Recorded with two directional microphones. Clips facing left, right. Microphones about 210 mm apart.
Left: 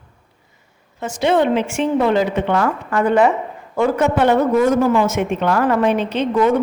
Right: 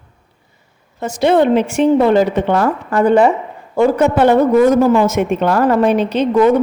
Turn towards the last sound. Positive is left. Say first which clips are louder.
# right 4 dB
turn(degrees=-40)  # may be behind; listen again after turning